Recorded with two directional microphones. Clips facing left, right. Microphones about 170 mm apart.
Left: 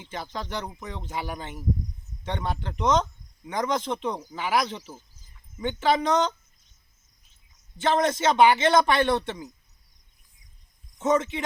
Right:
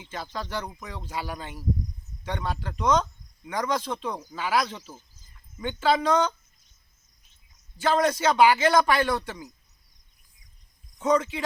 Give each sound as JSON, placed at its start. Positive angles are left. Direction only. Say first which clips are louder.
{"t": 0.1, "sound": "speech", "louder": "even", "side_deg": 20}
{"t": 7.8, "sound": "speech", "louder": "even", "side_deg": 25}
{"t": 10.9, "sound": "speech", "louder": "even", "side_deg": 25}